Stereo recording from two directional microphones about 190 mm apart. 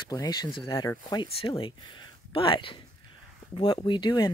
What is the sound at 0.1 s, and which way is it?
Speech, 20° left (ahead or behind).